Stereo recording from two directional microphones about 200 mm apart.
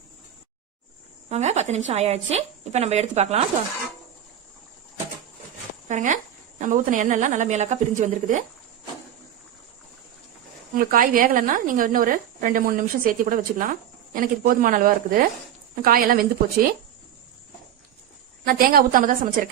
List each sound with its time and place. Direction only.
1.3 s a woman's voice: 35° right (ahead or behind)
5.9 s a woman's voice: 40° right (ahead or behind)
10.8 s a woman's voice: 45° right (ahead or behind)
18.4 s a woman's voice: 45° right (ahead or behind)